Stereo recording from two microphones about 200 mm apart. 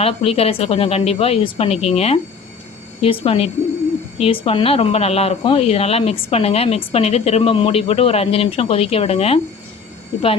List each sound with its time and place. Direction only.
0.0 s speech: 30° left (ahead or behind)